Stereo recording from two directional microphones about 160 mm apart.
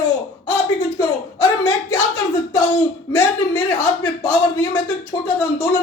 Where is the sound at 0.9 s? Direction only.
15° left (ahead or behind).